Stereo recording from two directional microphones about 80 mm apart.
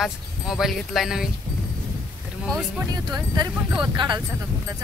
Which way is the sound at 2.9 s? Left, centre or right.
Right.